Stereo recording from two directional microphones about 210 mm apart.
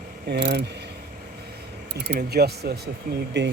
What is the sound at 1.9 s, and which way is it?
Speech, 50° right (ahead or behind).